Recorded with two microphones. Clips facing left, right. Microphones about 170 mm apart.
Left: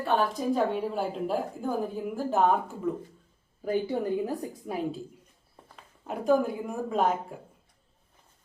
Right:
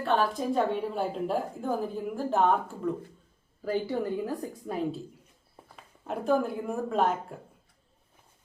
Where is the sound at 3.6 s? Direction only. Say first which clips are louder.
Left 1 dB; 15° left (ahead or behind).